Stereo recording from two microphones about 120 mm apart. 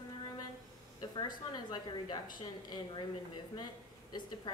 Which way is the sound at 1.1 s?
35° left (ahead or behind).